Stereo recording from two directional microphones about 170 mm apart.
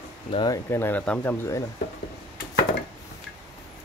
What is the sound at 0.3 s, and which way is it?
Speech, 30° left (ahead or behind).